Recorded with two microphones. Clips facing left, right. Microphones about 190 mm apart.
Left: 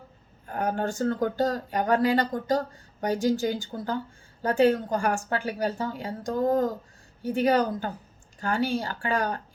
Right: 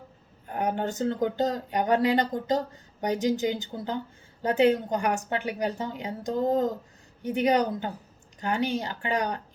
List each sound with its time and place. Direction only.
0.4 s speech: 20° right (ahead or behind)